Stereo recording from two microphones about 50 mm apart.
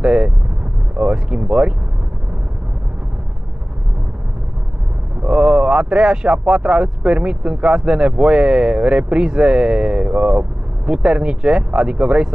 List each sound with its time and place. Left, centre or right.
0.0 s vehicle: centre
5.2 s speech: centre